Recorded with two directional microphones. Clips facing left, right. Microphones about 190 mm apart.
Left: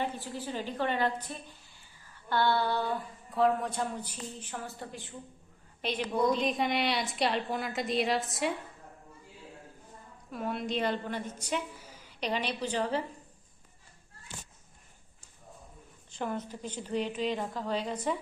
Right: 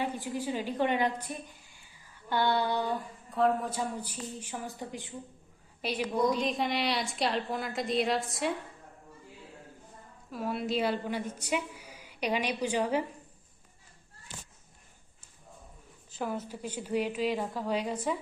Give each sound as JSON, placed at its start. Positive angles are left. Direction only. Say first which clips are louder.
{"t": 0.0, "sound": "a woman's voice", "louder": "right 2 dB", "side_deg": -10}
{"t": 3.3, "sound": "a woman's voice", "louder": "even", "side_deg": 0}
{"t": 10.3, "sound": "a woman's voice", "louder": "right 2 dB", "side_deg": -5}
{"t": 16.1, "sound": "a woman's voice", "louder": "even", "side_deg": -5}